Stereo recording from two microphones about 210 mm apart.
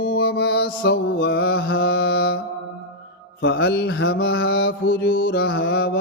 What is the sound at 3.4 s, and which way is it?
Mantra, 50° left (ahead or behind).